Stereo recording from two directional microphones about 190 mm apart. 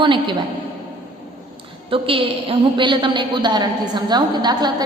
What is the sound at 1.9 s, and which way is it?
A woman's voice, 30° right (ahead or behind).